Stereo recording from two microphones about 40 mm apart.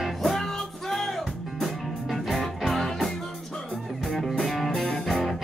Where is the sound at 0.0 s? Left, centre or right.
Centre.